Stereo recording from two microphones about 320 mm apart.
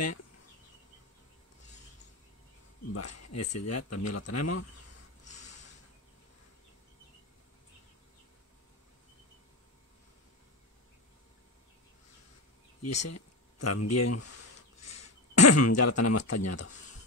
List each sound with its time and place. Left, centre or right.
2.9 s speech: left
12.8 s speech: left